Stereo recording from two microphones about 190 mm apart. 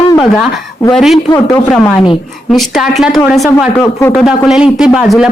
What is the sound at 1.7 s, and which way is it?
A woman's voice, 5° left (ahead or behind).